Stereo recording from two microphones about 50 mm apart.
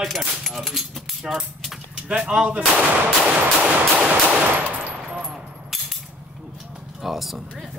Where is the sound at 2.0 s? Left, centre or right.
Centre.